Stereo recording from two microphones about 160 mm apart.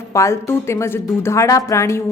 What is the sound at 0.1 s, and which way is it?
A woman's voice, 20° left (ahead or behind).